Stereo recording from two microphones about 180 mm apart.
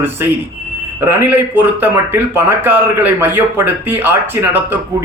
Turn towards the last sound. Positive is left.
turn(degrees=-10)  # may be behind; listen again after turning